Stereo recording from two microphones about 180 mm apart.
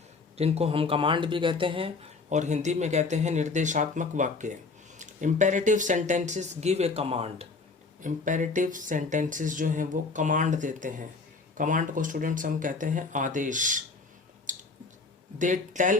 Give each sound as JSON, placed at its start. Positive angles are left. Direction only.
{"t": 0.3, "sound": "speech", "side_deg": -35}
{"t": 2.3, "sound": "speech", "side_deg": -40}
{"t": 8.0, "sound": "speech", "side_deg": -45}
{"t": 14.5, "sound": "squish", "side_deg": -45}
{"t": 15.4, "sound": "speech", "side_deg": -45}